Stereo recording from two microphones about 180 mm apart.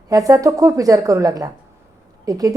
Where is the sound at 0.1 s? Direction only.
20° right (ahead or behind).